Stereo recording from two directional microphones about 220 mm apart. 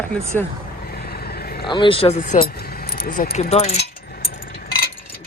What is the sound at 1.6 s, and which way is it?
Speech, 20° left (ahead or behind).